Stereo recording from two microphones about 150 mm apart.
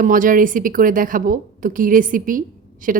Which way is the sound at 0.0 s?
65° right (ahead or behind).